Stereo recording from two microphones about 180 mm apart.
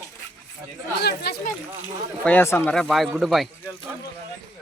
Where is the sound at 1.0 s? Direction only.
60° left (ahead or behind).